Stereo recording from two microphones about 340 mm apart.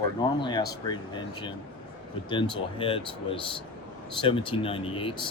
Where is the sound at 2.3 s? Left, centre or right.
Centre.